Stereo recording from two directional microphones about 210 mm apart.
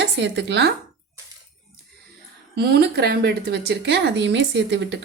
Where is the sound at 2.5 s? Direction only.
50° right (ahead or behind).